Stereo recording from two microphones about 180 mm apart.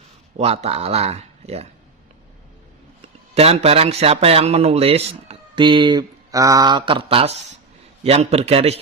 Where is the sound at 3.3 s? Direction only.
35° right (ahead or behind).